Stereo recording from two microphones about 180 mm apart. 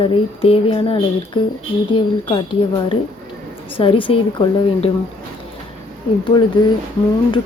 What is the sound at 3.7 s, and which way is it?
Speech, 30° left (ahead or behind).